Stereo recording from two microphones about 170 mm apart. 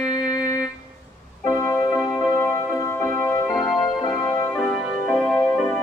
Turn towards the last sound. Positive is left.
turn(degrees=10)  # may be behind; listen again after turning